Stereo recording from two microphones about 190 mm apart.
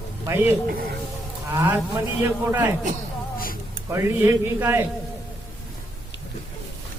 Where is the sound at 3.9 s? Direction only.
10° right (ahead or behind).